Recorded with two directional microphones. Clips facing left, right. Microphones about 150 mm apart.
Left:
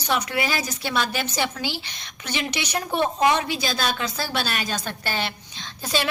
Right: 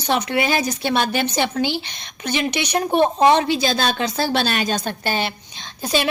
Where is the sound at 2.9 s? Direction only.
30° right (ahead or behind).